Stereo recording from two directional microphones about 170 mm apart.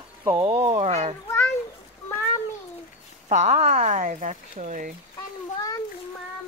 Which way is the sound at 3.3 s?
40° right (ahead or behind).